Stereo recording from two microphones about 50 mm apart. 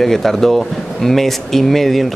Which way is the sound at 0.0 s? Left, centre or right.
Centre.